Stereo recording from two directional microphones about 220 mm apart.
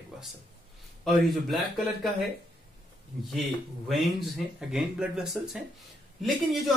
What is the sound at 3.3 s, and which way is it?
Speech, centre (ahead or behind).